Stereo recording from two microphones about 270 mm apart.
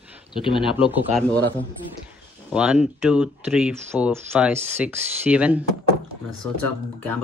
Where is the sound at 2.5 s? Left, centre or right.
Centre.